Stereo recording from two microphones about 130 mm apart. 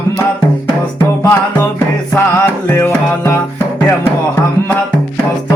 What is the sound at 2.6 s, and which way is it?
Music, 15° left (ahead or behind).